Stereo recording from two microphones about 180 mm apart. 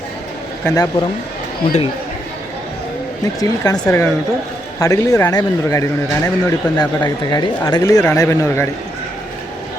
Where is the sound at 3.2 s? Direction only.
20° left (ahead or behind).